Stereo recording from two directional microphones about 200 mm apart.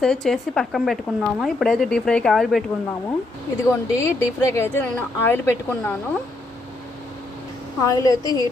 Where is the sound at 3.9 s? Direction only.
15° left (ahead or behind).